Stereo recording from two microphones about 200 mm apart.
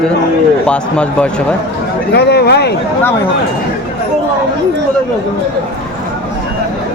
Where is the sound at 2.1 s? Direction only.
55° left (ahead or behind).